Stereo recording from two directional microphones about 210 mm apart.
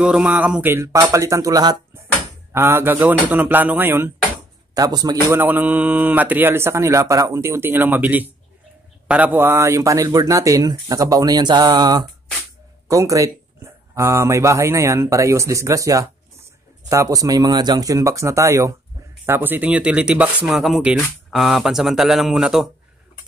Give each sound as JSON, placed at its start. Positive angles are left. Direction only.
{"t": 0.0, "sound": "a man's voice", "side_deg": -5}